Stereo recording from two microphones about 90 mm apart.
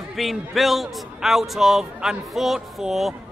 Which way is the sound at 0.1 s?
Centre (ahead or behind).